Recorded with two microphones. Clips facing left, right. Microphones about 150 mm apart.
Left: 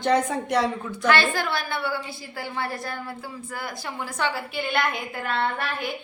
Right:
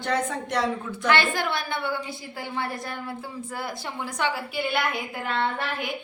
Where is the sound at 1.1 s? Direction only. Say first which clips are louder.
Left 1 dB; 20° right (ahead or behind).